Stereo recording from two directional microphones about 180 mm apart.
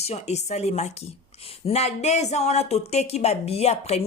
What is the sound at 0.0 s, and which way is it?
Speech, 35° left (ahead or behind).